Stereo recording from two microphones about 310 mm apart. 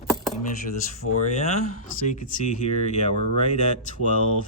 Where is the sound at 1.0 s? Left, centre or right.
Left.